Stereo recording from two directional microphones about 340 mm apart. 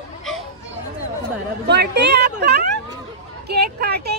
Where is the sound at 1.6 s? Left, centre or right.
Right.